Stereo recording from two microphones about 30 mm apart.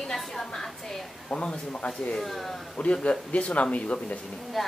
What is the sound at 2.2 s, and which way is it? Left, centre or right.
Speech, centre.